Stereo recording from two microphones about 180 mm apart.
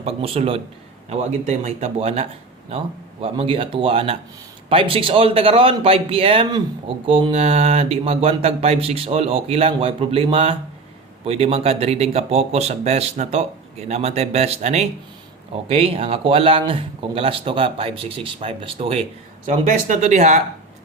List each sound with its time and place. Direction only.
0.0 s a man's voice: 35° right (ahead or behind)
19.5 s a man's voice: 45° right (ahead or behind)